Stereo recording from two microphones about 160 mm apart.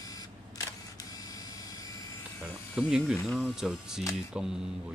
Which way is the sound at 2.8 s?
5° right (ahead or behind).